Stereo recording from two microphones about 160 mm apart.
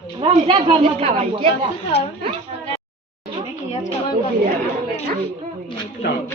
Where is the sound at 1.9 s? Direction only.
90° left.